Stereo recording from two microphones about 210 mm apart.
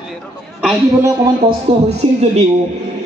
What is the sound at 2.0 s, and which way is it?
Speech, 30° right (ahead or behind).